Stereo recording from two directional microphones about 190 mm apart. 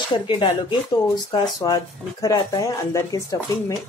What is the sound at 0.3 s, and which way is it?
Speech, 25° left (ahead or behind).